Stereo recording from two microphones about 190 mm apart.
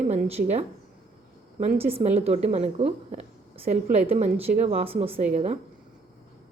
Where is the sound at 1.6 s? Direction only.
30° right (ahead or behind).